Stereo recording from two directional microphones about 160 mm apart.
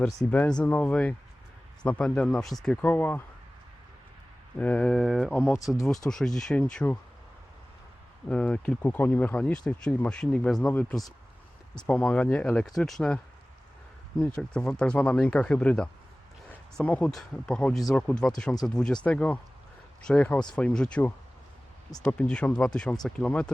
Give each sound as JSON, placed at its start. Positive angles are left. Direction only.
{"t": 0.3, "sound": "speech", "side_deg": 10}
{"t": 4.5, "sound": "speech", "side_deg": 10}
{"t": 8.3, "sound": "speech", "side_deg": 10}
{"t": 14.2, "sound": "speech", "side_deg": 5}